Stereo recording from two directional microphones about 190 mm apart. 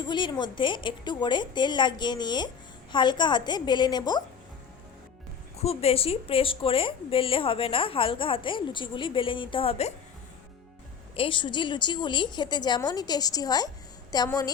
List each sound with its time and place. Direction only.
0.0 s a woman's voice: 25° left (ahead or behind)
5.5 s a woman's voice: 30° left (ahead or behind)
11.1 s a woman's voice: 25° left (ahead or behind)